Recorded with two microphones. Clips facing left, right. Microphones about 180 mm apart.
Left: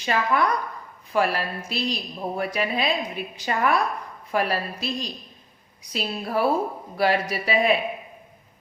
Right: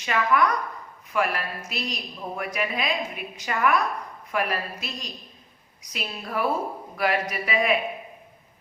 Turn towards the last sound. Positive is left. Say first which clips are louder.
# left 3 dB
turn(degrees=30)  # may be behind; listen again after turning